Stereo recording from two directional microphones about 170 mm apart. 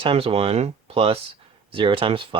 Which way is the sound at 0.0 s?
35° right (ahead or behind).